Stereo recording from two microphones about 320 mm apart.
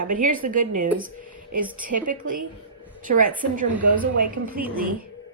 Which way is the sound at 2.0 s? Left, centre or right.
Right.